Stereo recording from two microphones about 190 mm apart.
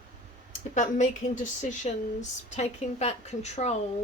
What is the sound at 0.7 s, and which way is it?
Speech, 40° left (ahead or behind).